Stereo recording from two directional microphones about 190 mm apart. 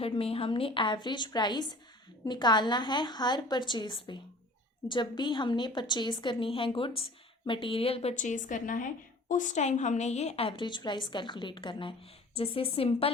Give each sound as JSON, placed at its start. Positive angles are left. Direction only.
{"t": 0.0, "sound": "a woman's voice", "side_deg": 30}